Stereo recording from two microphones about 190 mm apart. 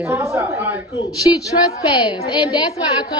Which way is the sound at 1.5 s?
40° left (ahead or behind).